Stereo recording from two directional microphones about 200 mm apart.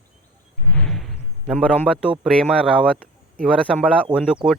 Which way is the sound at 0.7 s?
Centre (ahead or behind).